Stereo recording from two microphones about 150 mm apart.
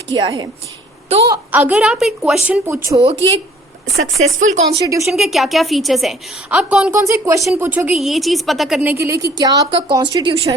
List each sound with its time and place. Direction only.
0.1 s a woman's voice: 25° right (ahead or behind)
1.5 s a woman's voice: 10° right (ahead or behind)
2.6 s a woman's voice: 20° right (ahead or behind)
3.0 s speech: 45° right (ahead or behind)
5.0 s a woman's voice: centre (ahead or behind)
7.0 s a woman's voice: 20° right (ahead or behind); by 8.8 s centre (ahead or behind)
8.8 s a woman's voice: 15° right (ahead or behind)